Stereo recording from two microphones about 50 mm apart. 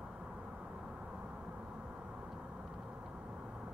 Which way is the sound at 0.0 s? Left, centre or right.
Centre.